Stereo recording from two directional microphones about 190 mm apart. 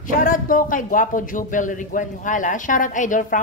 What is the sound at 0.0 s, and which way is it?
A woman's voice, 45° left (ahead or behind).